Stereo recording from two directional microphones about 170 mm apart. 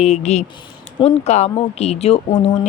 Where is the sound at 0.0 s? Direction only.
40° left (ahead or behind).